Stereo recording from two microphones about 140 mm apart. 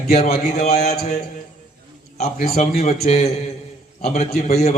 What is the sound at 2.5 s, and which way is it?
Speech, 85° left.